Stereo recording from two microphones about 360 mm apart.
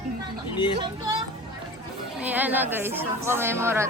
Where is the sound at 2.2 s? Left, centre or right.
Centre.